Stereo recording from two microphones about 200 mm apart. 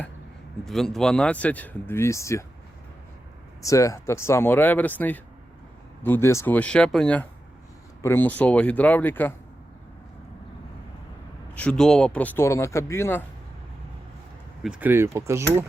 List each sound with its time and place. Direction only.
0.6 s speech: centre (ahead or behind)
3.6 s speech: 15° left (ahead or behind)
11.5 s speech: 5° left (ahead or behind)
14.6 s speech: 5° right (ahead or behind)